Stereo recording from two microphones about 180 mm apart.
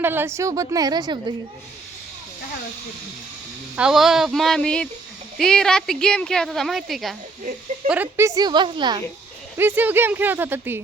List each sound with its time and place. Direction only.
0.0 s speech: 10° right (ahead or behind)
3.8 s a woman's voice: 5° right (ahead or behind); by 9.0 s 25° right (ahead or behind)
9.6 s speech: 10° right (ahead or behind)